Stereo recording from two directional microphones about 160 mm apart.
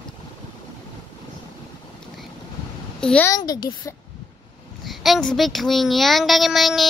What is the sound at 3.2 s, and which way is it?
Speech, 25° left (ahead or behind).